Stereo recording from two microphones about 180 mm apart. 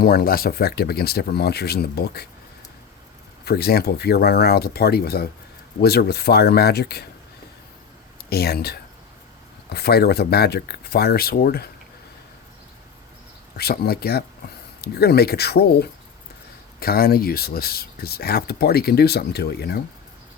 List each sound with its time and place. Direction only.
0.0 s speech: 55° left (ahead or behind)
3.4 s speech: 60° left (ahead or behind)
8.3 s speech: 60° left (ahead or behind)
13.6 s speech: 60° left (ahead or behind)